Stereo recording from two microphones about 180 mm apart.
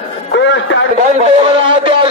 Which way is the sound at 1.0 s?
35° right (ahead or behind).